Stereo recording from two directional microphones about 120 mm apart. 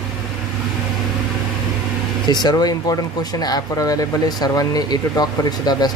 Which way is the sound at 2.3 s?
35° left (ahead or behind).